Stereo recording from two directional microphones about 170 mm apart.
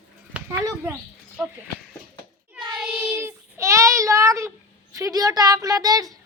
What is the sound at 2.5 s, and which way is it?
Child singing, 30° right (ahead or behind).